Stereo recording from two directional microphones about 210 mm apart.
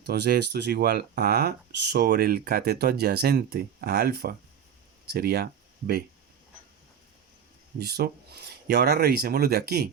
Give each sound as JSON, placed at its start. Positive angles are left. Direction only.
{"t": 0.0, "sound": "speech", "side_deg": -50}
{"t": 7.8, "sound": "speech", "side_deg": -50}